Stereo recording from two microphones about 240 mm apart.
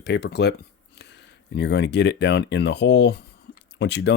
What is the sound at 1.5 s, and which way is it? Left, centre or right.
Speech, left.